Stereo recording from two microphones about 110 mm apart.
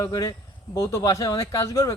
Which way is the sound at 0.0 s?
35° left (ahead or behind).